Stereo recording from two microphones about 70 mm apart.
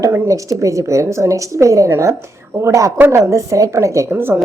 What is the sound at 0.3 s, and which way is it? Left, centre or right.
Speech, right.